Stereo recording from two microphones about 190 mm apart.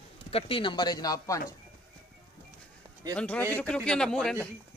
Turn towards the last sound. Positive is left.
turn(degrees=5)  # may be behind; listen again after turning